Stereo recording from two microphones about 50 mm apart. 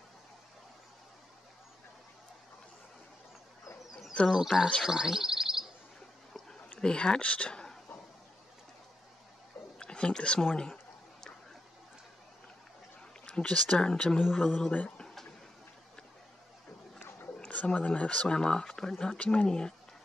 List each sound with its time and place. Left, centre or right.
4.3 s speech: centre
4.8 s bird: centre
6.7 s speech: centre
9.8 s speech: centre
13.2 s speech: centre
17.7 s speech: left
19.1 s speech: left
19.4 s speech: centre